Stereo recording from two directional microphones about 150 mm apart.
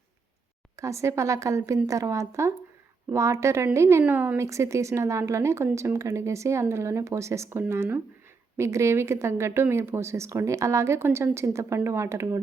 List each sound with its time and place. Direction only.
0.8 s a woman's voice: 20° right (ahead or behind)